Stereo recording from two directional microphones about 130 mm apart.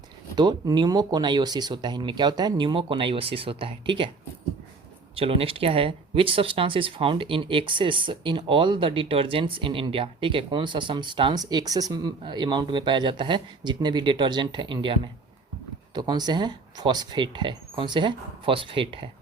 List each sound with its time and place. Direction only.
0.3 s speech: 35° right (ahead or behind)
5.1 s speech: 45° right (ahead or behind)